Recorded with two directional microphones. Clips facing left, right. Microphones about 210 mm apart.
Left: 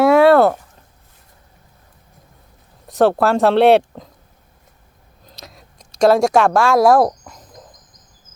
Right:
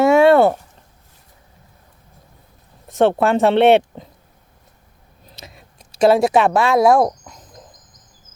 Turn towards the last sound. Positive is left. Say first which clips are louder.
# left 1 dB
turn(degrees=0)  # may be behind; listen again after turning